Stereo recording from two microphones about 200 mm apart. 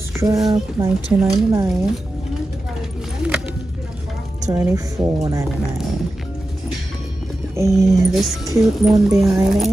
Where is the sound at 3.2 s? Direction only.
5° right (ahead or behind).